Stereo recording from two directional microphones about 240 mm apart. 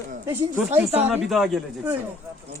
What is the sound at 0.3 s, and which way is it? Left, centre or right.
Speech, centre.